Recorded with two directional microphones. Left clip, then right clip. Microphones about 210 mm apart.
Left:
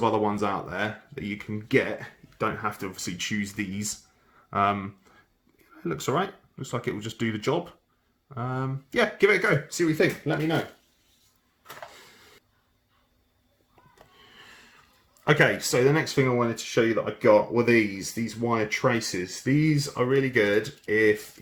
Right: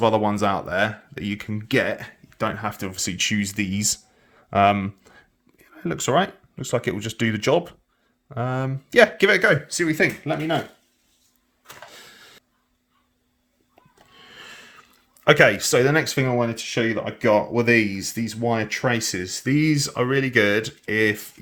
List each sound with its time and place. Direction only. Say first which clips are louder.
0.0 s speech: right 5 dB; 55° right (ahead or behind)
14.3 s a sound: right 9 dB; 45° right (ahead or behind)
15.2 s speech: right 6 dB; 40° right (ahead or behind)